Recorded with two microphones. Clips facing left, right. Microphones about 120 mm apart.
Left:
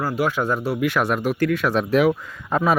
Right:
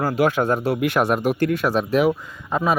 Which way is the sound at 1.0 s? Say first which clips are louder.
Right 2 dB; 15° right (ahead or behind).